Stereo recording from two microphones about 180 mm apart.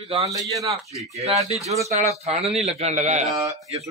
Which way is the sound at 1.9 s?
40° right (ahead or behind).